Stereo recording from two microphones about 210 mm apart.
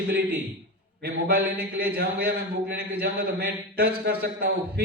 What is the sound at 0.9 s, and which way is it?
A man's voice, 50° right (ahead or behind).